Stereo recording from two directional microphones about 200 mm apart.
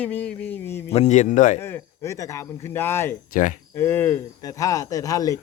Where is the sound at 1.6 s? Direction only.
10° left (ahead or behind).